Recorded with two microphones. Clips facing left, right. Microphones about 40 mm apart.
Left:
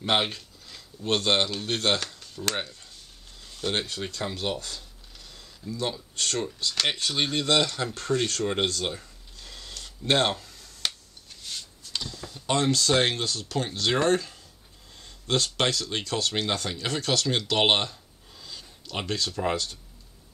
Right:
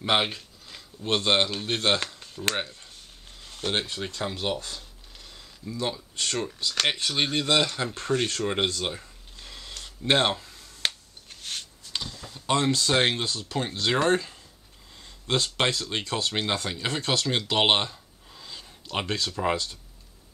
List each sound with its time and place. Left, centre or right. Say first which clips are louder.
0.0 s speech: right 1 dB; centre
3.6 s speech: even; right
4.2 s speech: right 1 dB; centre
5.8 s speech: right 1 dB; centre
7.9 s speech: even; right
8.8 s a sound: even; centre
10.4 s a sound: right 2 dB; right
11.9 s computer keyboard: even; centre
12.7 s speech: even; right